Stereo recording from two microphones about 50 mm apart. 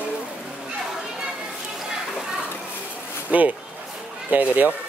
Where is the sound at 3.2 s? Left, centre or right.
Right.